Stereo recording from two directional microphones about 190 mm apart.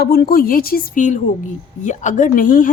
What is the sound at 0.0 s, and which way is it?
A woman's voice, 50° left (ahead or behind).